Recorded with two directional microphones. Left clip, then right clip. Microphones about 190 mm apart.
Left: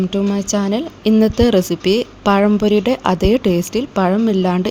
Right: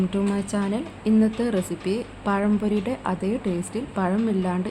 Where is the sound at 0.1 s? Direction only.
30° left (ahead or behind).